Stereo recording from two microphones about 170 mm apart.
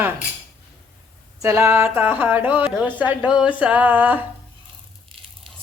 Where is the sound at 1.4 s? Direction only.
15° right (ahead or behind).